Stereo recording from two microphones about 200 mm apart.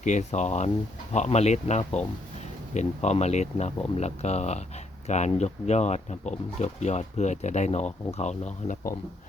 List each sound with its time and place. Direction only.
0.0 s speech: 35° left (ahead or behind)